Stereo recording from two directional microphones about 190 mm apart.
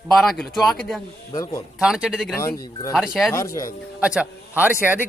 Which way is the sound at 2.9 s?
Centre (ahead or behind).